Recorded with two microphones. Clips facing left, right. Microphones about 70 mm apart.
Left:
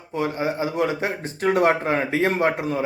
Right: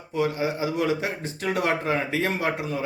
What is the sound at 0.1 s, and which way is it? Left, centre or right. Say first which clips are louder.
Speech: left 1 dB; left.